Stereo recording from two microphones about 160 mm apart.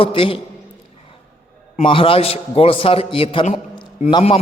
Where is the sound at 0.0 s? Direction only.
35° left (ahead or behind).